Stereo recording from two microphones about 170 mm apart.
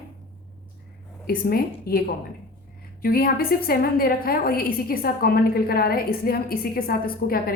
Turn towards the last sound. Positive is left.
turn(degrees=60)  # may be behind; listen again after turning